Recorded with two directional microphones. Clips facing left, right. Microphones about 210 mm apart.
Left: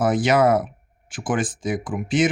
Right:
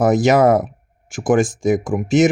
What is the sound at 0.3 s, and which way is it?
Speech, 45° right (ahead or behind).